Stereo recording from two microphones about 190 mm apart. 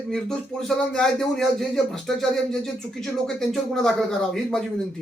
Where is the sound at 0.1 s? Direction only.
5° left (ahead or behind).